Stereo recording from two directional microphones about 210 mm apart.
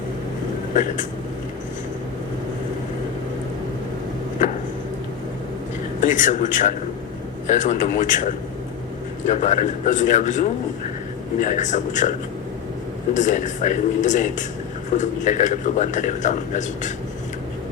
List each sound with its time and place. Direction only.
6.0 s a man's voice: 35° left (ahead or behind)
13.1 s a man's voice: 35° left (ahead or behind)